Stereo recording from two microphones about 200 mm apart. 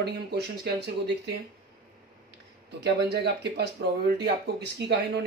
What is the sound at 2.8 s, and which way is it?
Speech, 60° right (ahead or behind).